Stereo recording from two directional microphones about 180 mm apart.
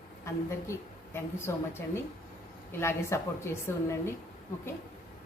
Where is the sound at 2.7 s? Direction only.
15° left (ahead or behind).